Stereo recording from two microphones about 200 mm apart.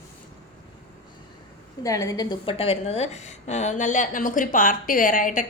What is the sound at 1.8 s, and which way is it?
A woman's voice, 15° left (ahead or behind).